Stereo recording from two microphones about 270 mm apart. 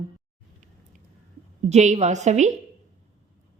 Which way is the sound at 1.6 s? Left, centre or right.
Right.